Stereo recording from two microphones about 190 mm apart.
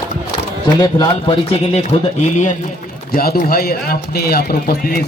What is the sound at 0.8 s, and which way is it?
Speech, 25° left (ahead or behind).